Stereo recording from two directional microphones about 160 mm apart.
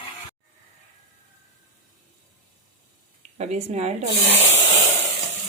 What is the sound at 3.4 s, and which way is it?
Speech, 40° right (ahead or behind).